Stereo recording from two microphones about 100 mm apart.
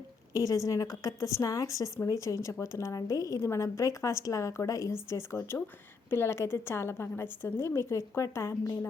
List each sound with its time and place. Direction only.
0.3 s a woman's voice: 35° left (ahead or behind)